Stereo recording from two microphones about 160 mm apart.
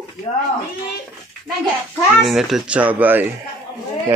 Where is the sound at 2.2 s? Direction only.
5° right (ahead or behind).